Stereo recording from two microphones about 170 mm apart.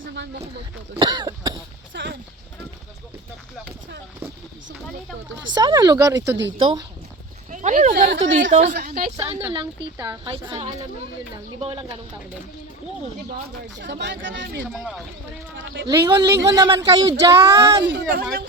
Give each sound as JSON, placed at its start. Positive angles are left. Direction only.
{"t": 0.9, "sound": "speech", "side_deg": -25}
{"t": 1.9, "sound": "a sound", "side_deg": -90}
{"t": 5.5, "sound": "speech", "side_deg": -25}
{"t": 7.5, "sound": "a sound", "side_deg": -45}
{"t": 7.9, "sound": "speech", "side_deg": -80}
{"t": 8.3, "sound": "a woman's voice", "side_deg": -45}
{"t": 9.6, "sound": "a woman's voice", "side_deg": -30}
{"t": 13.7, "sound": "speech", "side_deg": -90}
{"t": 14.6, "sound": "speech", "side_deg": 0}
{"t": 15.5, "sound": "speech", "side_deg": -90}
{"t": 15.9, "sound": "speech", "side_deg": -30}
{"t": 17.3, "sound": "speech", "side_deg": -20}
{"t": 17.8, "sound": "speech", "side_deg": -85}